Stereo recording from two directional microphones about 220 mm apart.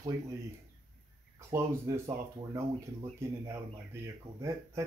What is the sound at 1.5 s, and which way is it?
Speech, 10° right (ahead or behind).